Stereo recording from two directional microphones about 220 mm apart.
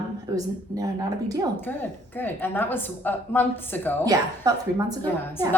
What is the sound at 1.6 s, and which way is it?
A woman's voice, 10° left (ahead or behind).